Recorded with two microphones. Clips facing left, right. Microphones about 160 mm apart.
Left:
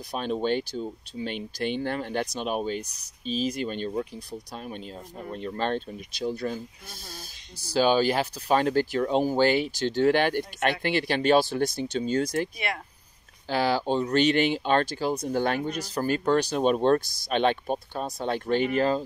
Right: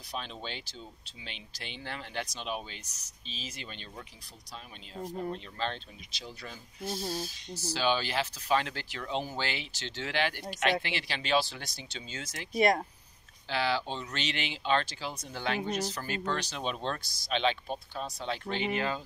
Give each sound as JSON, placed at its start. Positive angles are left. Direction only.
{"t": 0.1, "sound": "speech", "side_deg": 50}
{"t": 5.3, "sound": "speech", "side_deg": 50}
{"t": 7.7, "sound": "speech", "side_deg": 45}
{"t": 12.5, "sound": "speech", "side_deg": -40}
{"t": 13.5, "sound": "speech", "side_deg": 45}